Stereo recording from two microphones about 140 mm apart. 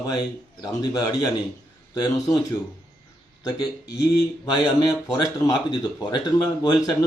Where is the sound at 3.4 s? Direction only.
25° left (ahead or behind).